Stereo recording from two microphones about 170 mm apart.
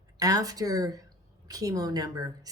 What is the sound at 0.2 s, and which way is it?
Speech, 20° right (ahead or behind).